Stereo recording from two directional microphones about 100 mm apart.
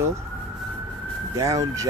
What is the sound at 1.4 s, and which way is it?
Speech, 35° right (ahead or behind).